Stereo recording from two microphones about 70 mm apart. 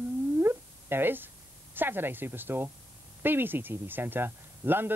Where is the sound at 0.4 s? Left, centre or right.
Right.